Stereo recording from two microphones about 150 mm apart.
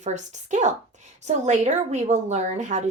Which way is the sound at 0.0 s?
50° right (ahead or behind).